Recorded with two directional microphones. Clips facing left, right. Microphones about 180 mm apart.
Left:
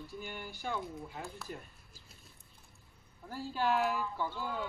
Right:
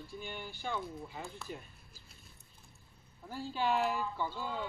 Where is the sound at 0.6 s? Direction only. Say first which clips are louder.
Left 1 dB; 5° left (ahead or behind).